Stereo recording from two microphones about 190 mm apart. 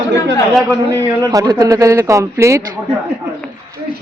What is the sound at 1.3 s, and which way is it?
A woman's voice, 20° right (ahead or behind).